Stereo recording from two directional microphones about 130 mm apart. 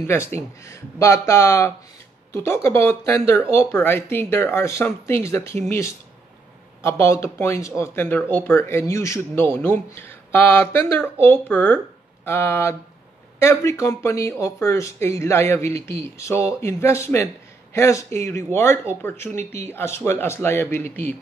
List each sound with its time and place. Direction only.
0.0 s speech: 20° left (ahead or behind)